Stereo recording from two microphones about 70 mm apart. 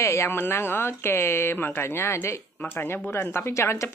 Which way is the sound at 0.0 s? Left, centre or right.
Left.